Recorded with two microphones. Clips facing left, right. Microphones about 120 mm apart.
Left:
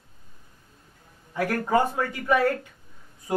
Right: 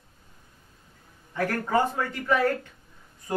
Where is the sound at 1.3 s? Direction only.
10° left (ahead or behind).